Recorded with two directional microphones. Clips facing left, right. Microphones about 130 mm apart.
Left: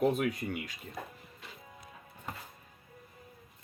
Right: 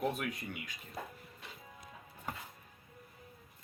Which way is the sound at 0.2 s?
50° left (ahead or behind).